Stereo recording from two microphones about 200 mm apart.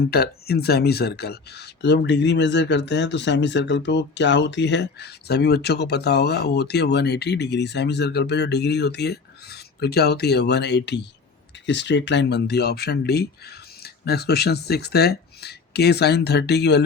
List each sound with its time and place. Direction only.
0.1 s speech: 50° left (ahead or behind)